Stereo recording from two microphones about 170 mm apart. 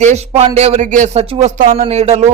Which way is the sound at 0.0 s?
40° right (ahead or behind).